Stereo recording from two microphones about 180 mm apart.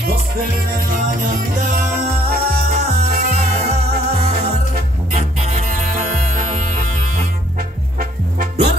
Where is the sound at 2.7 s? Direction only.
40° right (ahead or behind).